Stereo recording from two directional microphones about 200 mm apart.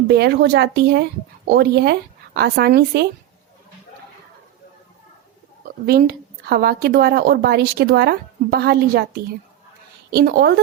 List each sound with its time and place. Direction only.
0.1 s a woman's voice: 55° right (ahead or behind)
5.8 s a woman's voice: 50° right (ahead or behind)